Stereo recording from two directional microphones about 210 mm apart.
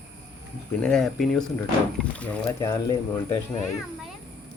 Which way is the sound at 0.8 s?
5° left (ahead or behind).